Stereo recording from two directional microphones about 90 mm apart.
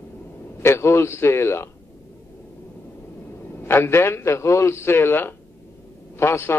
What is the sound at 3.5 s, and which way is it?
A man's voice, 25° left (ahead or behind).